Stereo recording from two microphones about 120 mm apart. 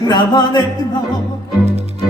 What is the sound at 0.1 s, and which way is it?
Speech, 35° left (ahead or behind).